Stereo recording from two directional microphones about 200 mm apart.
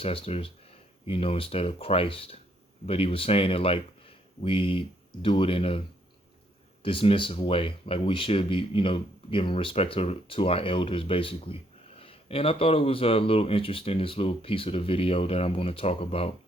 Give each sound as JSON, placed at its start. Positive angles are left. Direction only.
{"t": 0.0, "sound": "speech", "side_deg": 30}
{"t": 6.8, "sound": "speech", "side_deg": 25}